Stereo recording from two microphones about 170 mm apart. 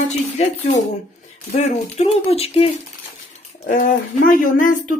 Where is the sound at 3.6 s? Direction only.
50° left (ahead or behind).